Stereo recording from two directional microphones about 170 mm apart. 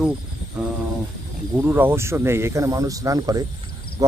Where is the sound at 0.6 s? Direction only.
5° right (ahead or behind).